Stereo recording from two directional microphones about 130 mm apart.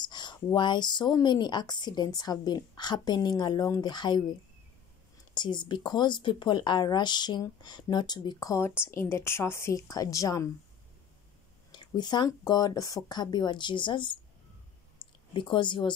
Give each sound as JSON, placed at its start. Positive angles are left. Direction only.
{"t": 0.0, "sound": "speech", "side_deg": 35}
{"t": 5.3, "sound": "speech", "side_deg": 35}
{"t": 11.7, "sound": "speech", "side_deg": 35}
{"t": 15.0, "sound": "a sound", "side_deg": 40}